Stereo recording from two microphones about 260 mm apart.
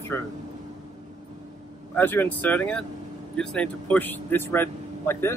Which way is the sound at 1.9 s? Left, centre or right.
Centre.